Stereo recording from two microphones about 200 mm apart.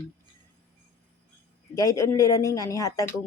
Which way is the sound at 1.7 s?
15° left (ahead or behind).